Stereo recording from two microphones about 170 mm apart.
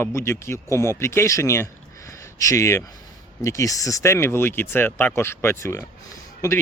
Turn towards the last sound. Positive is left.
turn(degrees=20)  # may be behind; listen again after turning